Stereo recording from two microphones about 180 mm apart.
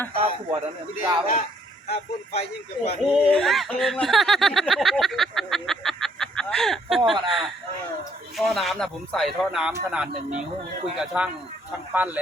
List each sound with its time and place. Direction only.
0.1 s a sound: 35° right (ahead or behind)
0.9 s speech: 50° left (ahead or behind)
1.9 s speech: 35° left (ahead or behind)
3.1 s speech: centre (ahead or behind)